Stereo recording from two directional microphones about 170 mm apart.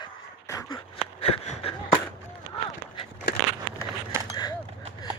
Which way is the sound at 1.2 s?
35° left (ahead or behind).